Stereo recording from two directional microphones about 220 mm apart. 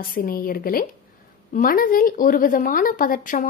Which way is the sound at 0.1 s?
40° left (ahead or behind).